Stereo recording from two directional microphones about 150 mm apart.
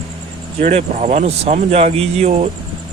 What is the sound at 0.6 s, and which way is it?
Speech, 50° right (ahead or behind).